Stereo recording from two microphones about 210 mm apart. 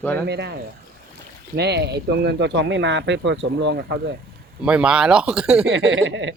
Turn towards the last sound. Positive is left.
turn(degrees=-60)  # may be behind; listen again after turning